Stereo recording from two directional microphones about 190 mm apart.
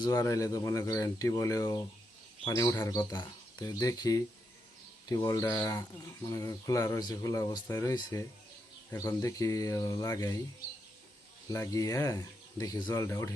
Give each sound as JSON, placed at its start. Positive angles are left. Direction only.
{"t": 0.0, "sound": "speech", "side_deg": 20}
{"t": 11.4, "sound": "speech", "side_deg": 15}